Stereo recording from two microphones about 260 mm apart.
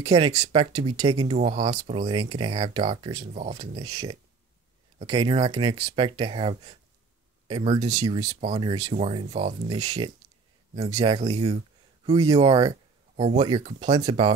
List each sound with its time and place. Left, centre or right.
0.0 s speech: right